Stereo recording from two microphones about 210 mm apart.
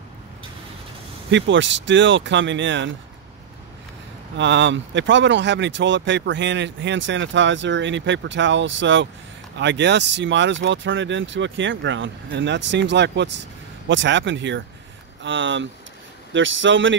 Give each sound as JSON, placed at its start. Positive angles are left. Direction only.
{"t": 1.3, "sound": "speech", "side_deg": -60}
{"t": 4.4, "sound": "speech", "side_deg": -60}